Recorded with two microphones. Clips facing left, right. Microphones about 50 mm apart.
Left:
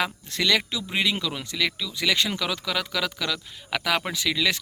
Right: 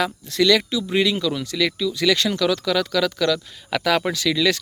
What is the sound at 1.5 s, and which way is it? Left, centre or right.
Speech, centre.